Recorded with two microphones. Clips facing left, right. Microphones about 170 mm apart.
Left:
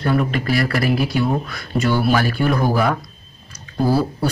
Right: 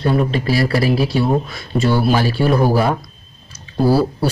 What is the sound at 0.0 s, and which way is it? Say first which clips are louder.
Speech: right 2 dB; 25° right (ahead or behind).